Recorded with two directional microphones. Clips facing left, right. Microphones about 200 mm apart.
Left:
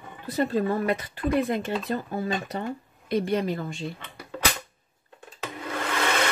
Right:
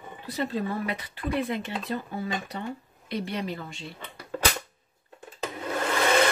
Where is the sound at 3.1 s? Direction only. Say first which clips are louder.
Left 6 dB; 50° left (ahead or behind).